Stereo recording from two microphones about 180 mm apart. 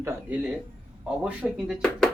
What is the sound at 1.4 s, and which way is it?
Speech, centre (ahead or behind).